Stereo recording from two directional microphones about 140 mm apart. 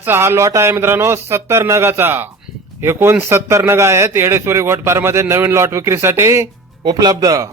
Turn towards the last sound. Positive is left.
turn(degrees=-25)  # may be behind; listen again after turning